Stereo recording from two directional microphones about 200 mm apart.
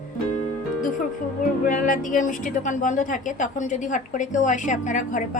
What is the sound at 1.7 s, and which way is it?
A woman's voice, 40° left (ahead or behind).